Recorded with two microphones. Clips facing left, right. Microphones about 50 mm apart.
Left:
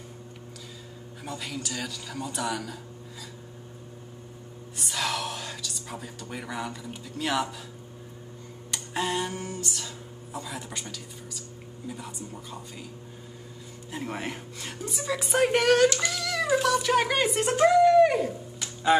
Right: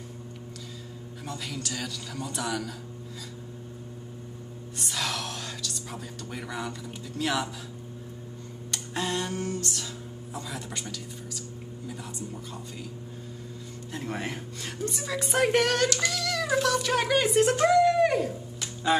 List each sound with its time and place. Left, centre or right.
1.2 s a woman's voice: centre
4.7 s speech: centre
8.7 s a sound: centre
10.3 s a woman's voice: centre
13.9 s a woman's voice: centre
15.9 s child singing: centre
16.3 s speech: centre